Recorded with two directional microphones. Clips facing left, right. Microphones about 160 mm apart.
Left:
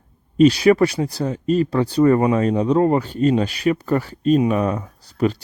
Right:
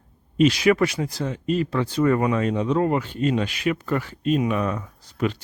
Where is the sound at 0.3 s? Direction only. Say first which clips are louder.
Left 5 dB; 35° left (ahead or behind).